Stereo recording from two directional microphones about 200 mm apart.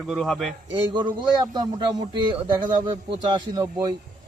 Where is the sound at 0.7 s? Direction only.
25° right (ahead or behind).